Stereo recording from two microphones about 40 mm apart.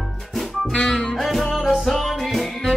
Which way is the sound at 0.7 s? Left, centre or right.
Centre.